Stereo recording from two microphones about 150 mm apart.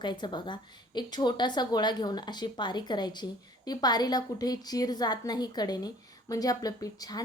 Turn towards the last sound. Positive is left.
turn(degrees=25)  # may be behind; listen again after turning